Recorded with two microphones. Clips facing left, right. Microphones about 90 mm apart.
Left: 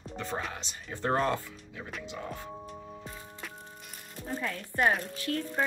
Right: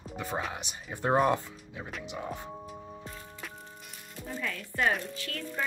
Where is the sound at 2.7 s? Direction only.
Centre (ahead or behind).